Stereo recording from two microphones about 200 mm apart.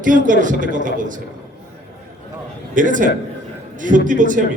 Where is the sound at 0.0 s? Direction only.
40° right (ahead or behind).